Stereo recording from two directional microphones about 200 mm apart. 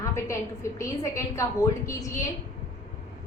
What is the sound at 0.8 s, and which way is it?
A woman's voice, 15° left (ahead or behind).